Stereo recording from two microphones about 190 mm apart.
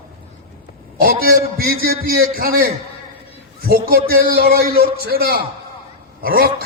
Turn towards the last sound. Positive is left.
turn(degrees=-55)  # may be behind; listen again after turning